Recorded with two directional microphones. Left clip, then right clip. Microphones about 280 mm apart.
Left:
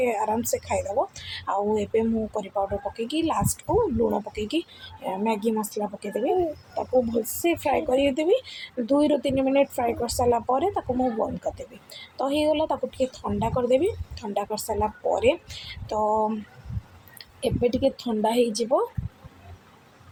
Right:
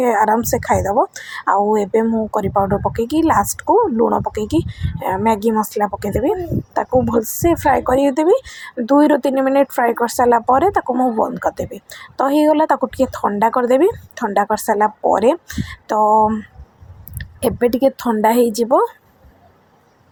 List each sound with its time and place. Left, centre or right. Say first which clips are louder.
0.0 s speech: right 10 dB; right